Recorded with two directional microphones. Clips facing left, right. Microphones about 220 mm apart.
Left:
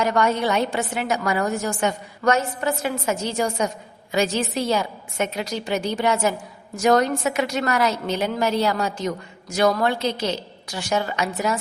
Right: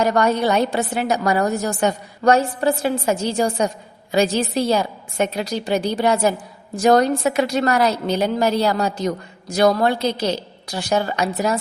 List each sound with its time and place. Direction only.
0.0 s a woman's voice: 35° right (ahead or behind)